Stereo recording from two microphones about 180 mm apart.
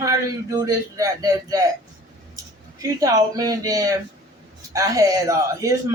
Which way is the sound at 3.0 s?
20° right (ahead or behind).